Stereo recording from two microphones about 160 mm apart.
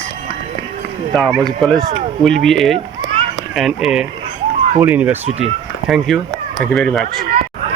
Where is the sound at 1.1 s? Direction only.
5° left (ahead or behind).